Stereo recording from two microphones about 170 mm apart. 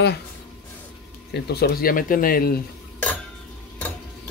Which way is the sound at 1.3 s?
75° left (ahead or behind).